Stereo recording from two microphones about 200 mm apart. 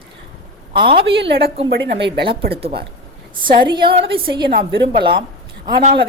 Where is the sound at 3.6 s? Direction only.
25° right (ahead or behind).